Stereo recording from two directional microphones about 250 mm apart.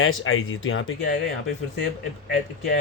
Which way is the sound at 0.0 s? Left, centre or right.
Left.